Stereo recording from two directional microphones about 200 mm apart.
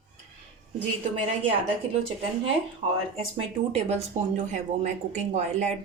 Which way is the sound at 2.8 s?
25° right (ahead or behind).